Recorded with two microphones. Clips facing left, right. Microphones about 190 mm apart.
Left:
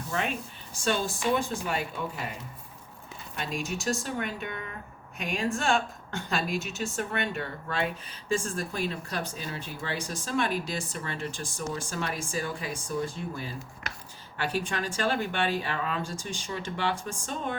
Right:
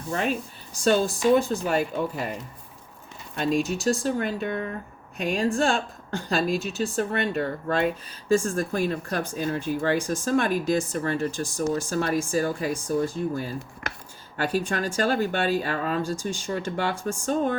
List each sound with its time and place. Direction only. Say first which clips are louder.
0.1 s a woman's voice: right 5 dB; 40° right (ahead or behind)
3.3 s a woman's voice: right 9 dB; 40° right (ahead or behind)